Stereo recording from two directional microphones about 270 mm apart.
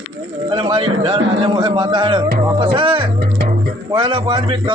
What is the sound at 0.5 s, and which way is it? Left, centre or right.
A man's voice, centre.